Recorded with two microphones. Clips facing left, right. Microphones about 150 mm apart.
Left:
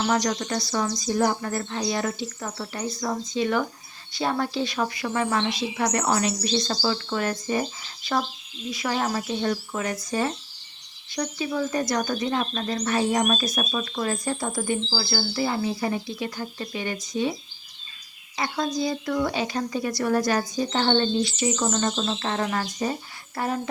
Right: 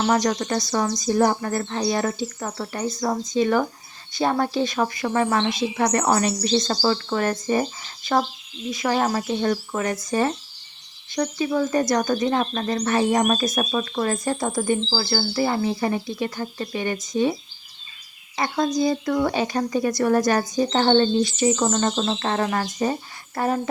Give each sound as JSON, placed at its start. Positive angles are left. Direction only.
{"t": 0.1, "sound": "speech", "side_deg": -50}
{"t": 8.8, "sound": "speech", "side_deg": -50}
{"t": 18.3, "sound": "speech", "side_deg": -50}